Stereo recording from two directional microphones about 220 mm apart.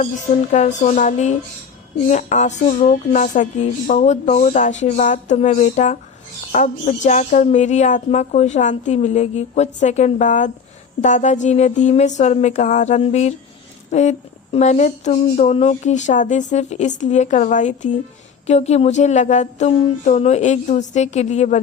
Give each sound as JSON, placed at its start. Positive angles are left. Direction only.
{"t": 0.5, "sound": "a woman's voice", "side_deg": 30}